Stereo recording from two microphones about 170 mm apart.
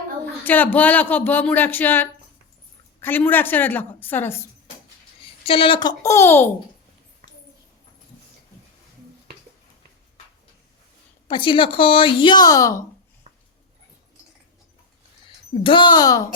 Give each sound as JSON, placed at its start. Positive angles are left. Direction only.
{"t": 0.4, "sound": "speech", "side_deg": 10}
{"t": 5.4, "sound": "speech", "side_deg": 35}
{"t": 11.3, "sound": "speech", "side_deg": 30}
{"t": 15.6, "sound": "speech", "side_deg": 30}